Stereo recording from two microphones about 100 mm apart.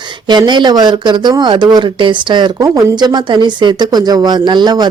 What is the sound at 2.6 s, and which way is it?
A woman's voice, 40° right (ahead or behind).